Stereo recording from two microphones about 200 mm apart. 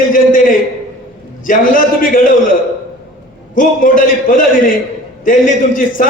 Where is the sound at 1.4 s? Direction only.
45° left (ahead or behind).